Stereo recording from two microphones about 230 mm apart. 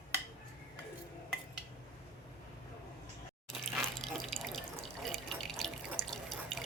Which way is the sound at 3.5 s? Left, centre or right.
Centre.